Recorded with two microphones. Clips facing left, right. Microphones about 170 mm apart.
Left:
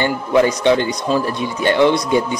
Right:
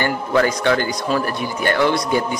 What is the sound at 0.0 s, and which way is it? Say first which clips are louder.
Speech: left 3 dB; 20° left (ahead or behind).